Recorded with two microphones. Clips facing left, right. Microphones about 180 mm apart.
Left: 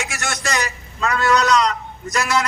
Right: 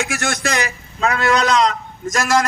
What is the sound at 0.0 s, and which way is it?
A man's voice, 55° right (ahead or behind).